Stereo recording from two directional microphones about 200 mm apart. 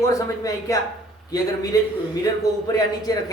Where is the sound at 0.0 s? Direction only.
15° left (ahead or behind).